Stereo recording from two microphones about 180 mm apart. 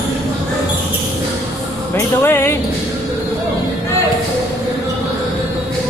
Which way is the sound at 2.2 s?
15° left (ahead or behind).